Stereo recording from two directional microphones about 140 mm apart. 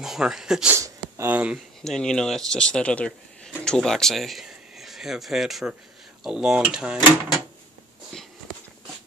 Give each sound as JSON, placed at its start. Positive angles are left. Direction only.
{"t": 0.0, "sound": "speech", "side_deg": -5}
{"t": 0.7, "sound": "speech", "side_deg": -20}
{"t": 1.9, "sound": "speech", "side_deg": 5}